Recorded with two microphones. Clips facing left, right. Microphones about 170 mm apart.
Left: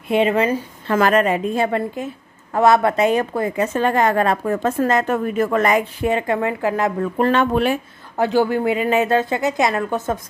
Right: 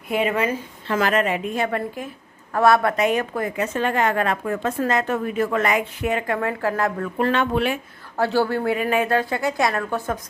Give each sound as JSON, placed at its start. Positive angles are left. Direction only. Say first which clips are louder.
{"t": 0.1, "sound": "a woman's voice", "louder": "left 5 dB", "side_deg": 30}
{"t": 0.8, "sound": "a woman's voice", "louder": "left 4 dB", "side_deg": 45}
{"t": 3.6, "sound": "a woman's voice", "louder": "left 4 dB", "side_deg": 40}
{"t": 7.2, "sound": "a woman's voice", "louder": "left 3 dB", "side_deg": 40}
{"t": 8.2, "sound": "a woman's voice", "louder": "left 3 dB", "side_deg": 15}